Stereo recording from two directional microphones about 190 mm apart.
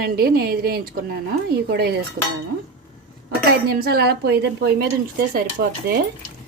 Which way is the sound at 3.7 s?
55° right (ahead or behind).